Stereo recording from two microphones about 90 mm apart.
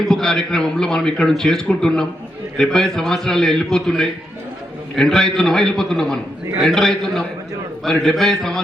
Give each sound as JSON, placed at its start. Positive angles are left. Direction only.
{"t": 0.1, "sound": "a man's voice", "side_deg": 5}